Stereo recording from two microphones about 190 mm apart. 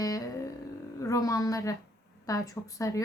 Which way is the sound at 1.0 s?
15° left (ahead or behind).